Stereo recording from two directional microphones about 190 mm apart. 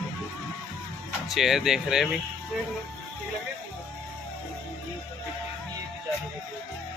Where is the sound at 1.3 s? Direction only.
Centre (ahead or behind).